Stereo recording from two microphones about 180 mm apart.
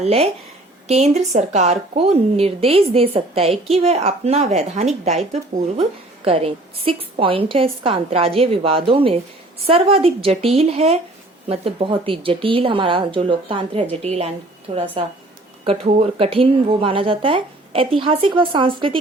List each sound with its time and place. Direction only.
0.0 s a woman's voice: 35° right (ahead or behind)